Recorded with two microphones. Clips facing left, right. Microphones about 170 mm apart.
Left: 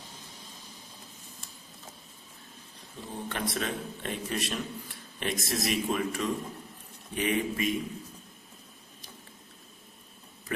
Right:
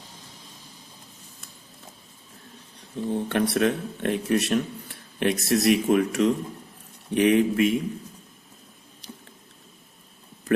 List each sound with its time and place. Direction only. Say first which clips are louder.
3.1 s a man's voice: right 10 dB; 65° right (ahead or behind)